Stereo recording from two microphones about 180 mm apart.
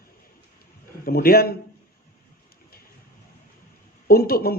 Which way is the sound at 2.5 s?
55° left (ahead or behind).